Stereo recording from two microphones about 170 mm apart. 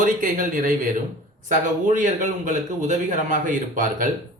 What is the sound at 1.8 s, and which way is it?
Speech, 45° right (ahead or behind).